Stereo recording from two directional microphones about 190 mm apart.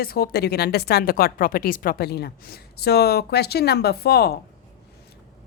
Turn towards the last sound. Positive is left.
turn(degrees=55)  # may be behind; listen again after turning